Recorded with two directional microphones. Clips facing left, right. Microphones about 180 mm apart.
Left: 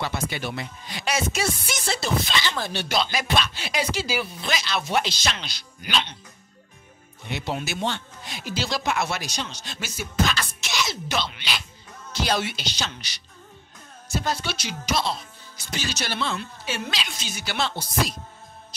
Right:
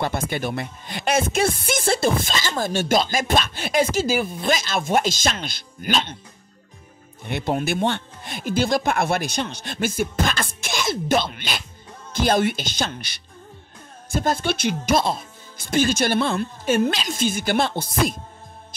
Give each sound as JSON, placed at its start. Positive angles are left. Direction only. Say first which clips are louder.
{"t": 0.0, "sound": "speech", "louder": "right 4 dB", "side_deg": -50}
{"t": 7.2, "sound": "speech", "louder": "right 6 dB", "side_deg": -50}